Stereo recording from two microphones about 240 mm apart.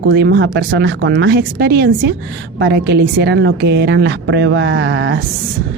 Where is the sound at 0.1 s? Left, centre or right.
Right.